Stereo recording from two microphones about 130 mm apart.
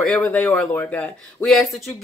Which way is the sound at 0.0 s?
10° left (ahead or behind).